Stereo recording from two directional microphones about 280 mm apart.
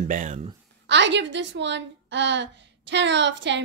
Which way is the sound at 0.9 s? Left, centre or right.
Right.